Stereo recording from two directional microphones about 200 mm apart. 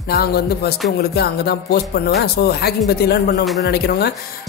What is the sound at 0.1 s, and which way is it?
Speech, 50° left (ahead or behind).